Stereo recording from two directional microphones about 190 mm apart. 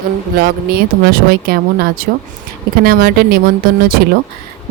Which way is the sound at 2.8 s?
50° right (ahead or behind).